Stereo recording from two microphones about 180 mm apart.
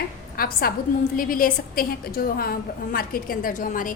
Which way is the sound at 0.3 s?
55° left (ahead or behind).